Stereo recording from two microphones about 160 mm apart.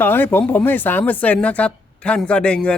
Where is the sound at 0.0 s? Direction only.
15° left (ahead or behind).